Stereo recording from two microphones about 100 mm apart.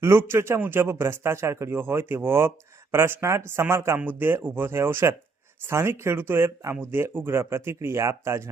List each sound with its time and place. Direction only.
0.0 s speech: 25° right (ahead or behind)